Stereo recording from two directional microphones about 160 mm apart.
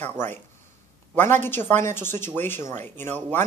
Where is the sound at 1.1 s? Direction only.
15° left (ahead or behind).